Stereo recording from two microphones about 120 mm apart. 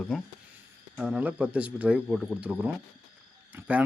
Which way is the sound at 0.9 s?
10° right (ahead or behind).